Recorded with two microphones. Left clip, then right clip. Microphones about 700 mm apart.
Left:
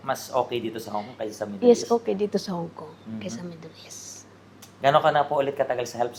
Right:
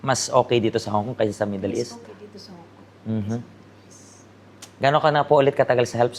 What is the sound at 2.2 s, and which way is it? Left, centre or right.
Speech, left.